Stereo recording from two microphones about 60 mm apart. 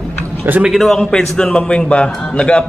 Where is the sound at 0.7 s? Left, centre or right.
Centre.